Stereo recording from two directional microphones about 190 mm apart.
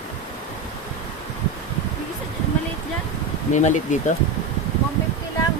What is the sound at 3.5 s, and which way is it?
Speech, 40° left (ahead or behind).